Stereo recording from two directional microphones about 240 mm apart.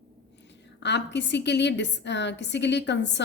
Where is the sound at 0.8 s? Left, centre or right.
Left.